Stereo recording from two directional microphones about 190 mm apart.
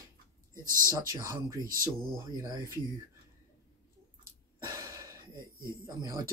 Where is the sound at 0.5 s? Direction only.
15° left (ahead or behind).